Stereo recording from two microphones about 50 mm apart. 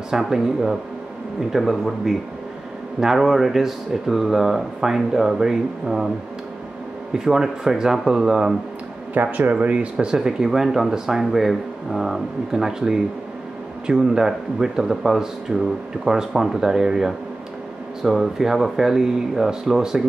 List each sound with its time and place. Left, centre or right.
0.1 s speech: centre
7.2 s speech: centre
9.1 s speech: right
9.9 s speech: centre